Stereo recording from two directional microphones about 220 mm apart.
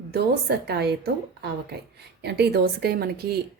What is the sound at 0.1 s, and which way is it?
Speech, 45° right (ahead or behind).